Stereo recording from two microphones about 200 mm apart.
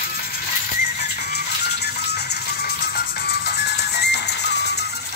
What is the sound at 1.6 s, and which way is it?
Music, 55° left (ahead or behind).